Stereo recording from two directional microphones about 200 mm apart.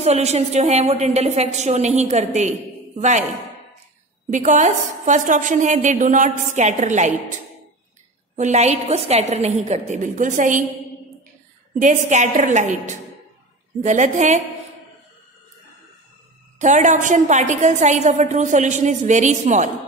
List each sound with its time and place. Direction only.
0.0 s a woman's voice: 35° right (ahead or behind)
4.3 s a woman's voice: 40° right (ahead or behind)
8.4 s a woman's voice: 35° right (ahead or behind)
11.8 s a woman's voice: 35° right (ahead or behind)
16.5 s a woman's voice: 35° right (ahead or behind)